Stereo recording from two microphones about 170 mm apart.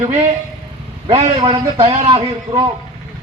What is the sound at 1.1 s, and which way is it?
A man's voice, 30° right (ahead or behind).